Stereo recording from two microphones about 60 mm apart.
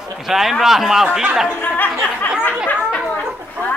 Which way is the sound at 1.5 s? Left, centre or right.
Left.